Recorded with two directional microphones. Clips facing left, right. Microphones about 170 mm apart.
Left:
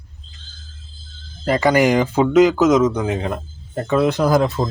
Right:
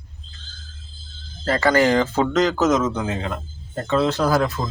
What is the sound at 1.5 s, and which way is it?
Speech, 15° left (ahead or behind).